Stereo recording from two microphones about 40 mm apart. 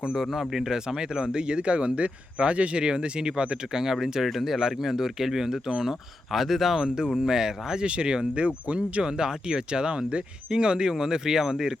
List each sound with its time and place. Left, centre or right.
0.2 s speech: centre; by 3.6 s right
3.7 s speech: centre
6.8 s speech: centre
7.9 s speech: right
9.0 s speech: centre